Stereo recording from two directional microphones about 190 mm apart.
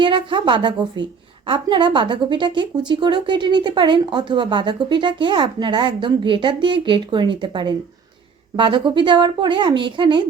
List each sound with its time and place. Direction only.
0.0 s speech: 25° right (ahead or behind)